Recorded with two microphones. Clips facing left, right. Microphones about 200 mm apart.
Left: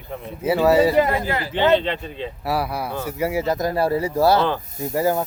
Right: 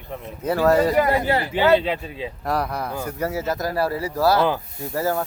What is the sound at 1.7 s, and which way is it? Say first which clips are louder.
Speech: even; 5° right (ahead or behind).